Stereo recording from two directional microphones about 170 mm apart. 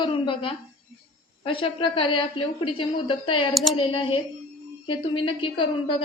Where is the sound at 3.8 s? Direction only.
30° left (ahead or behind).